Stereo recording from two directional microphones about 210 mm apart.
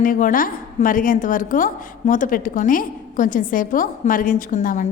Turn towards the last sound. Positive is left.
turn(degrees=35)  # may be behind; listen again after turning